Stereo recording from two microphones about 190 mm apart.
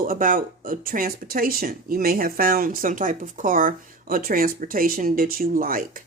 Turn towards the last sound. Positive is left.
turn(degrees=-45)  # may be behind; listen again after turning